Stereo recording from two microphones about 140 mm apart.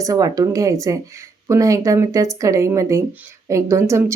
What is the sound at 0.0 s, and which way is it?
Speech, 25° right (ahead or behind).